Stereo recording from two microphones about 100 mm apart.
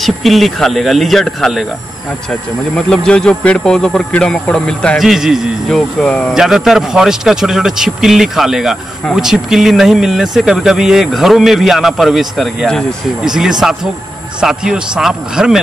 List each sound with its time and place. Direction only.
0.0 s speech: centre (ahead or behind)
2.7 s speech: 5° left (ahead or behind)
6.3 s speech: 5° right (ahead or behind)